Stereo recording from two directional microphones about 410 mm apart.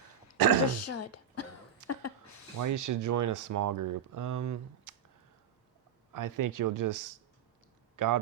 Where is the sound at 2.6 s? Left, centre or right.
Right.